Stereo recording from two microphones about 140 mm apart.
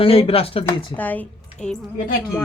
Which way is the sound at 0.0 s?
40° left (ahead or behind).